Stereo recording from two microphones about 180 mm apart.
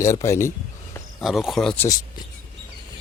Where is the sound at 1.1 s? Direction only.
Centre (ahead or behind).